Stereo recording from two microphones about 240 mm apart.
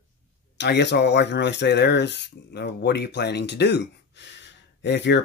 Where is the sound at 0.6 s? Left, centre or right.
Left.